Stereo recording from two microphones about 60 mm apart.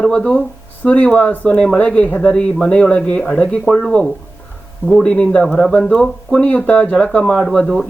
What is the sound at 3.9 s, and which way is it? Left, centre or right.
Speech, centre.